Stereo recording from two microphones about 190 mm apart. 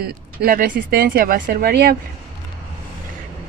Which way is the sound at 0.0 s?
55° right (ahead or behind).